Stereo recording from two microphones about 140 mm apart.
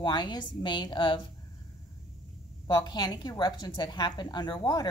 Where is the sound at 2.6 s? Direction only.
30° left (ahead or behind).